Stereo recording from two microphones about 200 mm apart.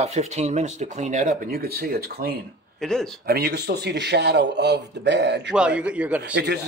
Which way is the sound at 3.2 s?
55° right (ahead or behind).